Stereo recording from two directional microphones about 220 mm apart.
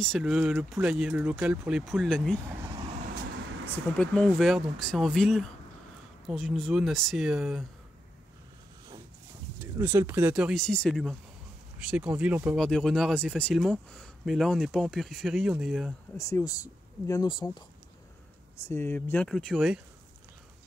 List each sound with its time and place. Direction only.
0.0 s speech: centre (ahead or behind)
4.0 s speech: 5° left (ahead or behind)
9.6 s speech: 10° right (ahead or behind)
16.2 s speech: 15° left (ahead or behind)
18.7 s speech: 10° left (ahead or behind)